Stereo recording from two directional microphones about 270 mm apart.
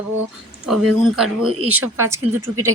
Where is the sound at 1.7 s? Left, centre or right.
Right.